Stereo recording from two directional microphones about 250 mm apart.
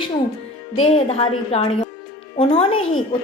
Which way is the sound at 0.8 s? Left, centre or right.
Left.